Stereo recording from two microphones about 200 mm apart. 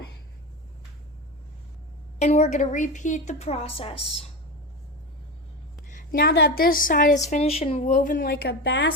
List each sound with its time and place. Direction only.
2.1 s a woman's voice: 35° left (ahead or behind)
5.9 s a woman's voice: 45° left (ahead or behind)